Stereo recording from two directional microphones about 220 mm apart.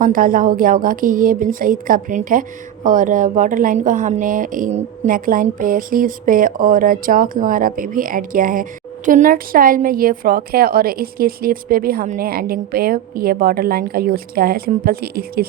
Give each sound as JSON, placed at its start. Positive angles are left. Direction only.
{"t": 0.0, "sound": "a woman's voice", "side_deg": -40}